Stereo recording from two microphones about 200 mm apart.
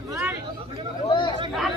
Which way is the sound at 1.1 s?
25° left (ahead or behind).